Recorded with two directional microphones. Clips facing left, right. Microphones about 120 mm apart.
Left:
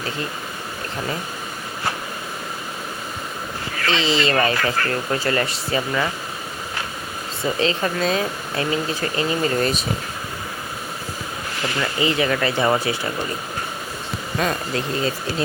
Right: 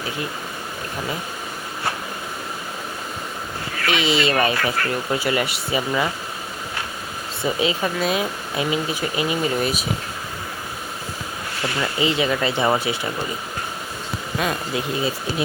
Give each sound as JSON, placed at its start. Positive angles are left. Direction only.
{"t": 3.8, "sound": "speech", "side_deg": -15}
{"t": 7.4, "sound": "speech", "side_deg": -10}
{"t": 11.9, "sound": "speech", "side_deg": -20}
{"t": 14.3, "sound": "speech", "side_deg": -5}